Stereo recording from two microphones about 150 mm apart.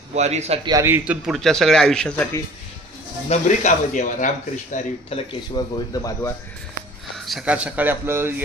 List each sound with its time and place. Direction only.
0.1 s a man's voice: 50° right (ahead or behind)
0.7 s a man's voice: 20° right (ahead or behind); by 2.2 s 5° left (ahead or behind)
3.3 s speech: 55° left (ahead or behind)
5.1 s speech: 40° left (ahead or behind); by 6.1 s 20° left (ahead or behind)
7.2 s speech: 5° right (ahead or behind)